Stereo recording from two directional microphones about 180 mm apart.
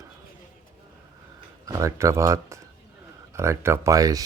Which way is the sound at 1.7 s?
15° right (ahead or behind).